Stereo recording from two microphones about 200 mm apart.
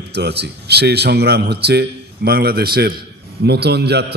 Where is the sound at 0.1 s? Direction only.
55° right (ahead or behind).